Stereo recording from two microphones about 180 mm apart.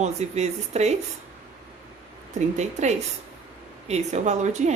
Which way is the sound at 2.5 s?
40° right (ahead or behind).